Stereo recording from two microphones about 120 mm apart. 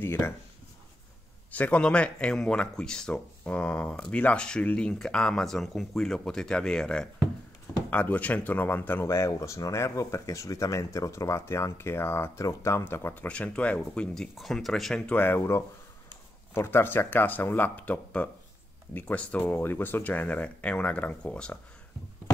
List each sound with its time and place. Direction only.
0.0 s speech: 20° left (ahead or behind)
1.5 s speech: 10° left (ahead or behind)